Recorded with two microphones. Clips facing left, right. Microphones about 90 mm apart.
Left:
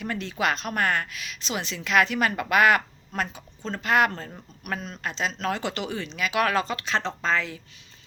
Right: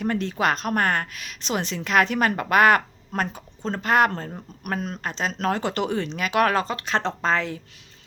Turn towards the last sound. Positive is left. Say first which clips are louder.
# right 3 dB
turn(degrees=-50)  # may be behind; listen again after turning